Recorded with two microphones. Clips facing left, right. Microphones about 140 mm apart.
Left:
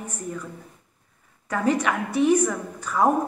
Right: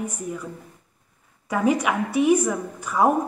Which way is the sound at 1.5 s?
10° right (ahead or behind).